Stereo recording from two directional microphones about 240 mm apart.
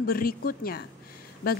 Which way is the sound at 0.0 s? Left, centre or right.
Left.